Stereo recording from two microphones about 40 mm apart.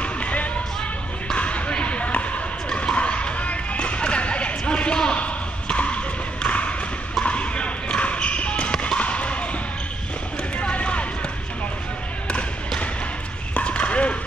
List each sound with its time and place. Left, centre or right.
0.0 s music: left
1.3 s basketball bounce: left
6.4 s a sound: left
7.2 s basketball bounce: left
10.6 s basketball bounce: left
12.3 s basketball bounce: left
13.6 s horse: left